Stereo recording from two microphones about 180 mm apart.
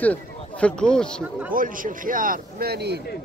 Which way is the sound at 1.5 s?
50° right (ahead or behind).